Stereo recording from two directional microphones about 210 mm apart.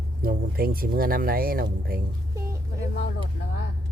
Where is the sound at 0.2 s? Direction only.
45° right (ahead or behind).